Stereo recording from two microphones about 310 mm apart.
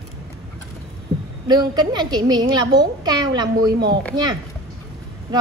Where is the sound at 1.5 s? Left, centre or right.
Centre.